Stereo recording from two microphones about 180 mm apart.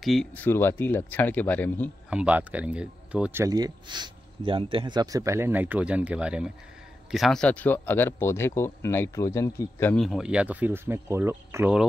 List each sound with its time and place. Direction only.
0.0 s speech: centre (ahead or behind)
2.0 s speech: 5° right (ahead or behind); by 9.9 s 15° left (ahead or behind)
9.9 s speech: centre (ahead or behind)